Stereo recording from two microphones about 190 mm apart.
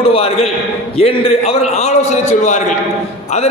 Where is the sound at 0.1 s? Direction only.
30° left (ahead or behind).